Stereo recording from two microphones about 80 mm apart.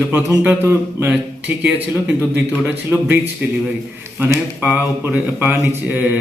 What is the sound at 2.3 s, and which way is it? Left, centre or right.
Speech, right.